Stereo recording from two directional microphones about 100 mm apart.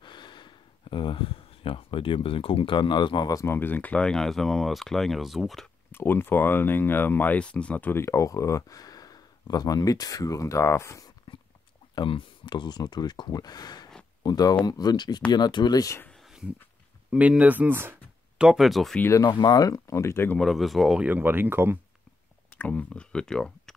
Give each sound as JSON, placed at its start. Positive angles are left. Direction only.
{"t": 0.0, "sound": "speech", "side_deg": 50}
{"t": 3.3, "sound": "speech", "side_deg": 25}
{"t": 5.9, "sound": "speech", "side_deg": 20}
{"t": 11.3, "sound": "dog", "side_deg": 55}
{"t": 11.9, "sound": "speech", "side_deg": 50}
{"t": 16.1, "sound": "a sound", "side_deg": 0}
{"t": 17.1, "sound": "speech", "side_deg": -10}
{"t": 18.4, "sound": "speech", "side_deg": -5}
{"t": 19.2, "sound": "speech", "side_deg": 45}
{"t": 20.3, "sound": "speech", "side_deg": 0}
{"t": 21.0, "sound": "speech", "side_deg": -20}
{"t": 22.5, "sound": "speech", "side_deg": 15}